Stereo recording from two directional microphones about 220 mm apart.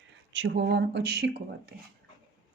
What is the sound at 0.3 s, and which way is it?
Speech, 50° right (ahead or behind).